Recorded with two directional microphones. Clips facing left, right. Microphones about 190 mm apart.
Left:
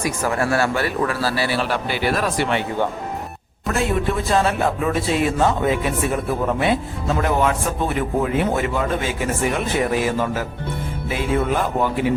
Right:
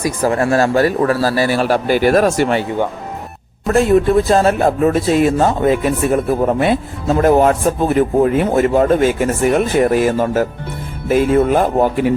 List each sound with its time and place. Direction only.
0.0 s a man's voice: 35° right (ahead or behind)
3.7 s a man's voice: 40° right (ahead or behind)